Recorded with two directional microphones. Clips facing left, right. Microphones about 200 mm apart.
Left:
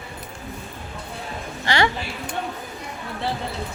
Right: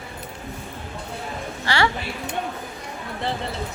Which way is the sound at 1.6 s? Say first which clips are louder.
Left 1 dB; 20° left (ahead or behind).